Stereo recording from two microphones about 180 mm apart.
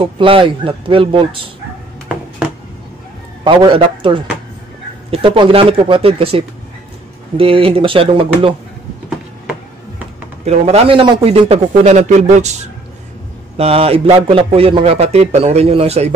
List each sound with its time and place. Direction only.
0.0 s speech: 30° right (ahead or behind)
3.4 s a man's voice: 30° right (ahead or behind)
10.4 s a man's voice: 35° right (ahead or behind)
13.6 s a man's voice: 35° right (ahead or behind)